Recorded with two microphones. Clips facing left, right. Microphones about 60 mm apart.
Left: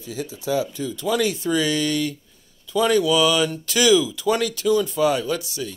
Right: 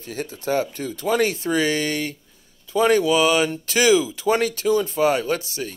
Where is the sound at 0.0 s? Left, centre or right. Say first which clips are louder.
Right 1 dB; right.